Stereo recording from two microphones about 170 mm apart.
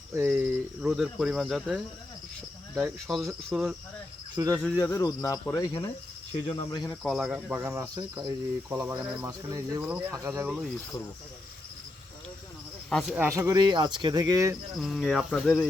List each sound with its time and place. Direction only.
0.3 s speech: 5° right (ahead or behind)
4.4 s speech: 20° right (ahead or behind)
4.8 s speech: 20° left (ahead or behind)
7.0 s speech: centre (ahead or behind)
9.2 s speech: 20° right (ahead or behind)
12.9 s speech: centre (ahead or behind); by 14.5 s 20° right (ahead or behind)
14.8 s speech: centre (ahead or behind)